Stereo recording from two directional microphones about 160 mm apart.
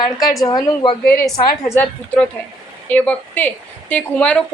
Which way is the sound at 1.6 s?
15° left (ahead or behind).